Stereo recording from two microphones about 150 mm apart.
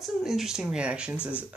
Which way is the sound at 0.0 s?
5° right (ahead or behind).